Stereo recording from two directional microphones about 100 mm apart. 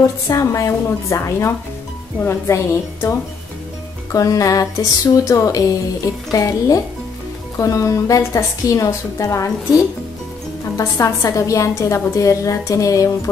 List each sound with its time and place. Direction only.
0.3 s a woman's voice: 35° left (ahead or behind)
10.8 s a woman's voice: 30° left (ahead or behind)